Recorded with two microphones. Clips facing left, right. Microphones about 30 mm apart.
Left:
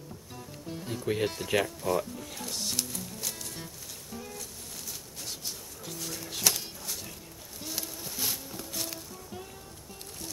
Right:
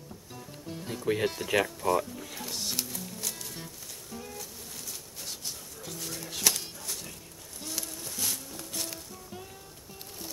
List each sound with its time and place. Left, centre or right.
0.3 s music: centre
5.2 s bird: centre
7.6 s music: centre